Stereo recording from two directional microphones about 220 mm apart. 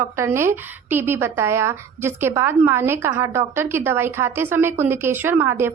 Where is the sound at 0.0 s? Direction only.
10° right (ahead or behind).